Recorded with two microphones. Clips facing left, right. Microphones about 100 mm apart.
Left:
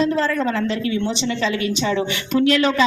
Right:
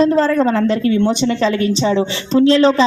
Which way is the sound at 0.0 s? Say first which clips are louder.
Right 6 dB; 40° right (ahead or behind).